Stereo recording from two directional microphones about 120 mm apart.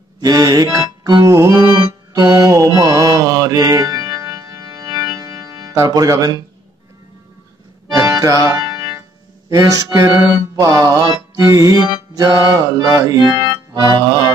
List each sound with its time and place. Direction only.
0.2 s music: 30° right (ahead or behind)
1.7 s mantra: 35° right (ahead or behind)
4.9 s music: 30° right (ahead or behind)
7.9 s accordion: 30° right (ahead or behind)
9.5 s music: 30° right (ahead or behind)